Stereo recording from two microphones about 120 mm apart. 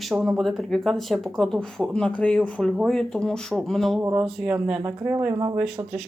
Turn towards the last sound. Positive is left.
turn(degrees=-35)  # may be behind; listen again after turning